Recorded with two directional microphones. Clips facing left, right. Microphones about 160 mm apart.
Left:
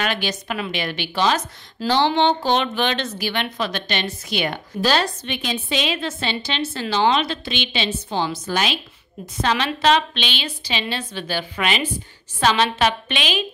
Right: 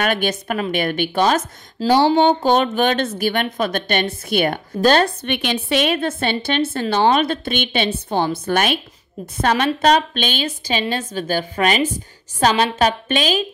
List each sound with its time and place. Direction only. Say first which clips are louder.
0.0 s speech: right 5 dB; 50° right (ahead or behind)
1.8 s speech: right 4 dB; 40° right (ahead or behind)